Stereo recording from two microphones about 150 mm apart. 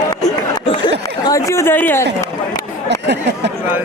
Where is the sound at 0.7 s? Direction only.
30° left (ahead or behind); by 2.1 s 15° left (ahead or behind).